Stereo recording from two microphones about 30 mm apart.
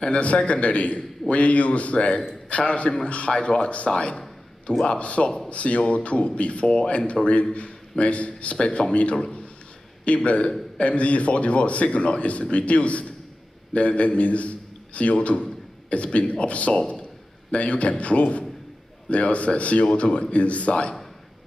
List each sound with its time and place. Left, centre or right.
0.1 s a man's voice: left
3.9 s speech: left
4.8 s a man's voice: left